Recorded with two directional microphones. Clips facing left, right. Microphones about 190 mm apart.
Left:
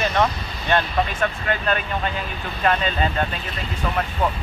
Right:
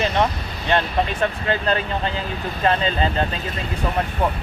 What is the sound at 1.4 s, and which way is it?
Speech, 30° right (ahead or behind).